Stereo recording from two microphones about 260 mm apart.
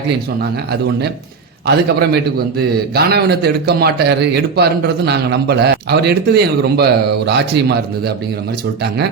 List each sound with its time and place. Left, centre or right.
1.6 s a man's voice: right